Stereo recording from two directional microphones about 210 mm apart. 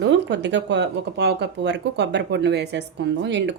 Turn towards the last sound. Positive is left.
turn(degrees=-55)  # may be behind; listen again after turning